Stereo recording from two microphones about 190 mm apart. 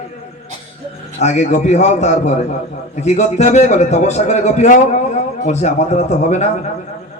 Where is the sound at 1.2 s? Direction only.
35° left (ahead or behind).